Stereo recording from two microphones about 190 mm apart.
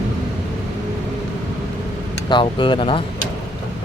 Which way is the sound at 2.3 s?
25° left (ahead or behind).